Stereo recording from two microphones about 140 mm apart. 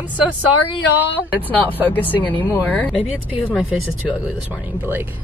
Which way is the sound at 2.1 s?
10° left (ahead or behind).